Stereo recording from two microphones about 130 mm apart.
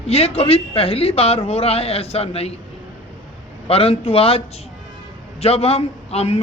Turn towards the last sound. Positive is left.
turn(degrees=55)  # may be behind; listen again after turning